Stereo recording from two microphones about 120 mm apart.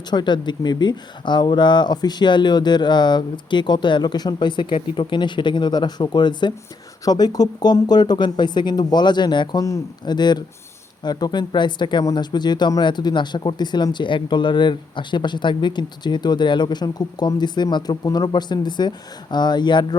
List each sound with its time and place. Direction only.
0.1 s speech: 35° left (ahead or behind)